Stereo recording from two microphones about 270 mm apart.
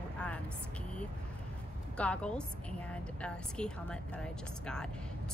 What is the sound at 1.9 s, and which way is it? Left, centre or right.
Speech, centre.